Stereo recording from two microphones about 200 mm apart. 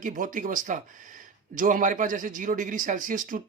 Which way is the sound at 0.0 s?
40° right (ahead or behind).